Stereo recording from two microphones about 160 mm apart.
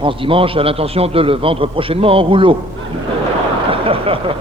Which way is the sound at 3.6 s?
35° right (ahead or behind).